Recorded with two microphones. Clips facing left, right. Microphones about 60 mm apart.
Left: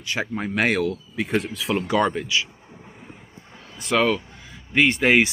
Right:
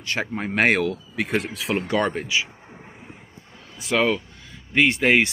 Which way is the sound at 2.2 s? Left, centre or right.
Right.